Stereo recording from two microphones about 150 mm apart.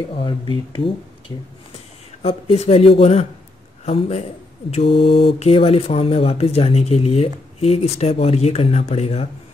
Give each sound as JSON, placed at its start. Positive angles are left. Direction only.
{"t": 0.2, "sound": "speech", "side_deg": 30}
{"t": 2.2, "sound": "a man's voice", "side_deg": 40}